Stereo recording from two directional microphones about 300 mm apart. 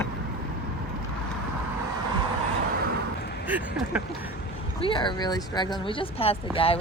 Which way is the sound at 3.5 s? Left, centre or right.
Centre.